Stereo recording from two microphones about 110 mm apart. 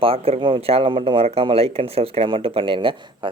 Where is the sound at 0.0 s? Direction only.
55° right (ahead or behind).